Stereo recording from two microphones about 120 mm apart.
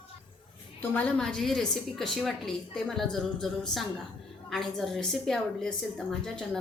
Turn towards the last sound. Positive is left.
turn(degrees=5)  # may be behind; listen again after turning